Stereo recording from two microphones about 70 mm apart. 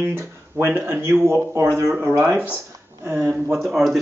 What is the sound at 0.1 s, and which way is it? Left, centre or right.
Speech, right.